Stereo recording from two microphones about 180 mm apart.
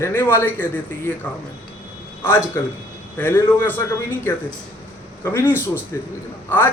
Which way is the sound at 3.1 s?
10° left (ahead or behind).